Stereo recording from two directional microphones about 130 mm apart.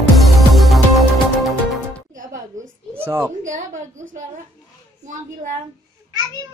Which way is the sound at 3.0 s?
20° right (ahead or behind).